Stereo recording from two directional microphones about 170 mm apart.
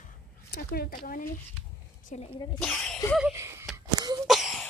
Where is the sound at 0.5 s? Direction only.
65° left (ahead or behind).